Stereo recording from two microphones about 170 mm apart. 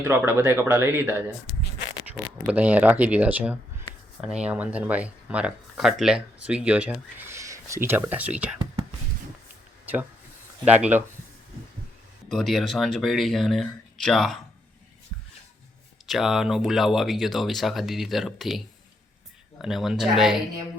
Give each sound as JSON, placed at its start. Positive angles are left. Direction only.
{"t": 0.0, "sound": "speech", "side_deg": -15}
{"t": 2.5, "sound": "speech", "side_deg": -10}
{"t": 9.8, "sound": "a sound", "side_deg": -10}
{"t": 10.7, "sound": "speech", "side_deg": -10}
{"t": 12.3, "sound": "speech", "side_deg": 0}
{"t": 16.0, "sound": "speech", "side_deg": 0}
{"t": 19.6, "sound": "speech", "side_deg": 0}